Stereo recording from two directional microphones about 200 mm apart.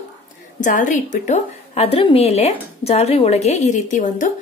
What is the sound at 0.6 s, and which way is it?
A woman's voice, 40° left (ahead or behind).